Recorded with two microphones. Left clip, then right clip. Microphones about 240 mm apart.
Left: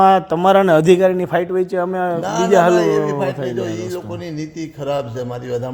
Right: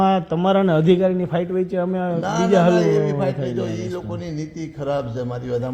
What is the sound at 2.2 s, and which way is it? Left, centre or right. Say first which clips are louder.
A man's voice: left 4 dB; left.